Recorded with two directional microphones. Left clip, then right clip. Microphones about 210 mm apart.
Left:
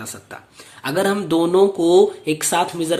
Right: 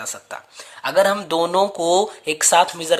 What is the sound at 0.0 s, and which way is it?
Speech, 25° right (ahead or behind).